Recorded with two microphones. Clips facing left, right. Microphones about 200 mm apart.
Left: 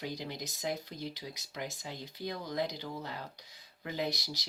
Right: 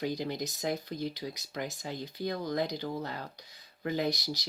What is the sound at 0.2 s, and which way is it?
Speech, 45° right (ahead or behind).